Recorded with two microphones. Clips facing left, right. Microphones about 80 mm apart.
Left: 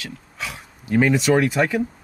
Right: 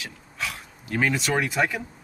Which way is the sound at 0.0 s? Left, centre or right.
Centre.